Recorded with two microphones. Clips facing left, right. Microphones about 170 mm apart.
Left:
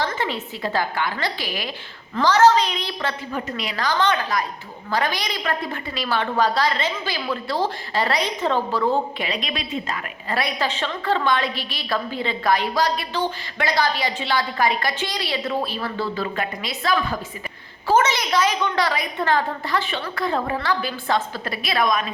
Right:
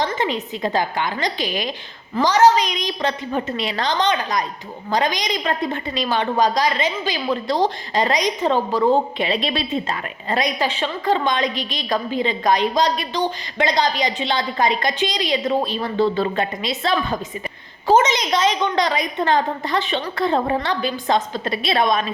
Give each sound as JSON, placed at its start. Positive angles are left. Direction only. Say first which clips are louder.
{"t": 0.0, "sound": "a woman's voice", "louder": "right 3 dB", "side_deg": -20}